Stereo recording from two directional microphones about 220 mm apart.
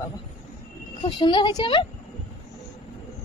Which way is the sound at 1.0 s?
20° left (ahead or behind).